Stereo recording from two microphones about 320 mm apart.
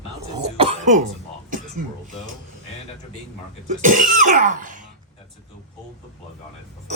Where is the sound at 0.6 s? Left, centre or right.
Centre.